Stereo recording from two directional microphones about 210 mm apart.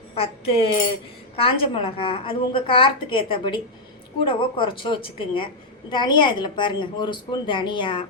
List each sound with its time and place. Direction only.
0.1 s a woman's voice: 25° left (ahead or behind)